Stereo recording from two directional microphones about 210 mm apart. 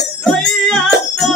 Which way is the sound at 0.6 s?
Centre (ahead or behind).